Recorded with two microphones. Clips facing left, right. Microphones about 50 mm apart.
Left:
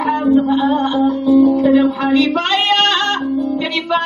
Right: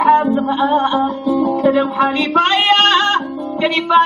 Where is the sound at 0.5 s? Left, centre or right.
Right.